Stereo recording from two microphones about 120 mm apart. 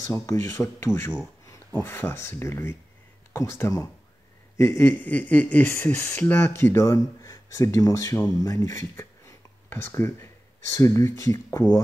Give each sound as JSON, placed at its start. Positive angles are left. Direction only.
{"t": 0.1, "sound": "speech", "side_deg": 25}